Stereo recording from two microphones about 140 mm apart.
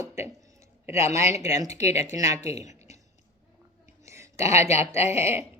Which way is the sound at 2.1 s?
25° right (ahead or behind).